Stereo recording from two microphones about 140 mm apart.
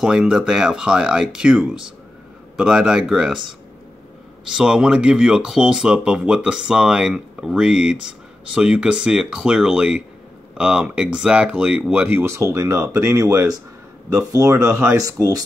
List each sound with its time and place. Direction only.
0.0 s speech: 5° right (ahead or behind)
4.5 s speech: 5° right (ahead or behind); by 15.4 s 25° right (ahead or behind)